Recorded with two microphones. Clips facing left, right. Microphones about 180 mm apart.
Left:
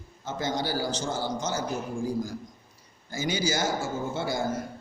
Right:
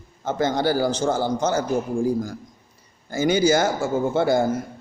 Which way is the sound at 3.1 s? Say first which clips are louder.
Right 10 dB; 55° right (ahead or behind).